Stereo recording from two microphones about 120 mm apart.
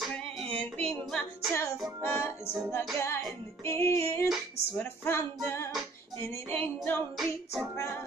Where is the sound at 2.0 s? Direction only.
20° left (ahead or behind).